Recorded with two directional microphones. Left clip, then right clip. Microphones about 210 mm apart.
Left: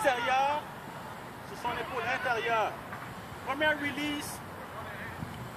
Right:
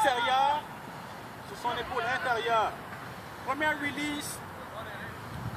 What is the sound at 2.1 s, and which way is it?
Speech, 10° left (ahead or behind).